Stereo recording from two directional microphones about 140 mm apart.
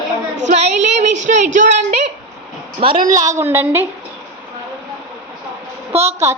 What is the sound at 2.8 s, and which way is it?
Speech, 40° right (ahead or behind).